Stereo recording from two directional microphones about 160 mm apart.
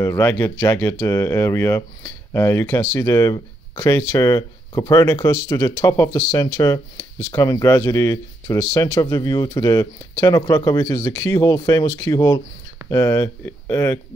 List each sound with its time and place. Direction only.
0.0 s speech: 15° left (ahead or behind)